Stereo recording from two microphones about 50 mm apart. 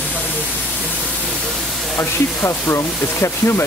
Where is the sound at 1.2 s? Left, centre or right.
Centre.